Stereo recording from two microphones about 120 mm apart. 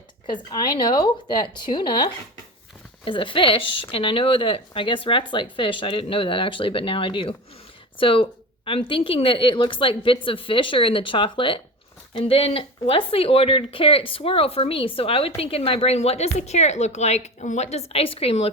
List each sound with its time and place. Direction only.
0.3 s a woman's voice: 35° left (ahead or behind)
7.9 s a sound: 50° left (ahead or behind)
8.9 s speech: 50° left (ahead or behind)
12.2 s speech: 60° left (ahead or behind)